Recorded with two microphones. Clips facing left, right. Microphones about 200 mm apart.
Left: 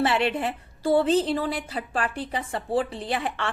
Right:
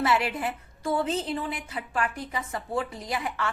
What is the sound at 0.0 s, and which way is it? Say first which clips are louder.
A woman's voice: left 3 dB; 30° left (ahead or behind).